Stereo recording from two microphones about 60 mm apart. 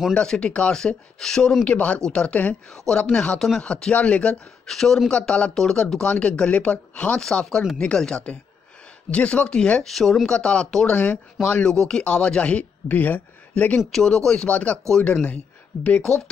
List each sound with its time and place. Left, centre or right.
0.1 s speech: centre
1.7 s a woman's voice: left
3.3 s speech: centre
3.6 s a woman's voice: centre
4.6 s speech: centre
7.2 s speech: centre
10.9 s a woman's voice: left
11.4 s a woman's voice: centre
13.9 s a woman's voice: centre